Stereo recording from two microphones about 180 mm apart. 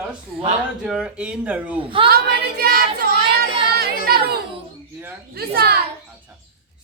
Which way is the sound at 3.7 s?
60° right (ahead or behind).